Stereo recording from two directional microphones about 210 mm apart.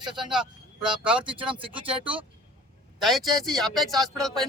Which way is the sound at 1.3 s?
25° right (ahead or behind).